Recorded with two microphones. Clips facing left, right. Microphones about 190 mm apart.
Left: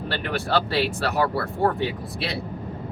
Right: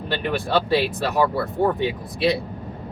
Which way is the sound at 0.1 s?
15° right (ahead or behind).